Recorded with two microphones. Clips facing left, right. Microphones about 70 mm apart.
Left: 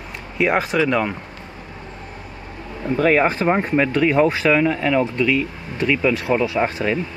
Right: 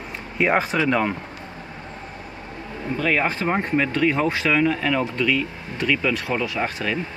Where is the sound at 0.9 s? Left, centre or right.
Centre.